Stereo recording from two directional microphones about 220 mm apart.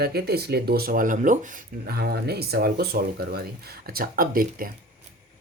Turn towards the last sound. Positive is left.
turn(degrees=-40)  # may be behind; listen again after turning